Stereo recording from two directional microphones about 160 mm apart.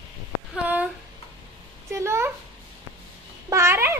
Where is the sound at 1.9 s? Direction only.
15° right (ahead or behind).